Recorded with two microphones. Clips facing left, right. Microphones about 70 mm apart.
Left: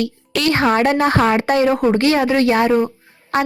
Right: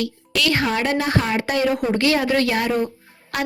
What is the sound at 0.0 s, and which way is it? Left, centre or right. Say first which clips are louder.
Speech: left 3 dB; left.